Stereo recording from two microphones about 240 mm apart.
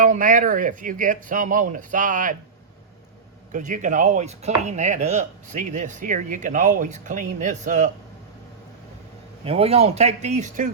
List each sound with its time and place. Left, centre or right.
0.0 s speech: right
3.5 s speech: right
9.4 s speech: right